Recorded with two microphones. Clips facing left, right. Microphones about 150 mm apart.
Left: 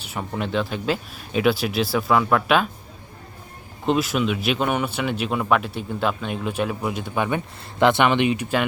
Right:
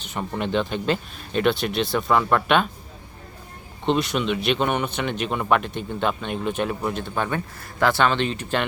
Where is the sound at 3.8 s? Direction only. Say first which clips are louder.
Left 1 dB; 5° left (ahead or behind).